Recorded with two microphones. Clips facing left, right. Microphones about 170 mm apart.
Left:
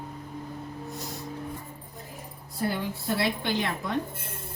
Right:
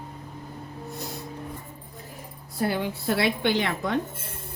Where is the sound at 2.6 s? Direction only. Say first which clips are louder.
Right 3 dB; 80° right.